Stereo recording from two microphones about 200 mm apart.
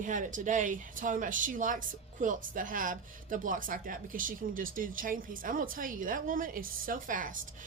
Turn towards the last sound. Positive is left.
turn(degrees=-40)  # may be behind; listen again after turning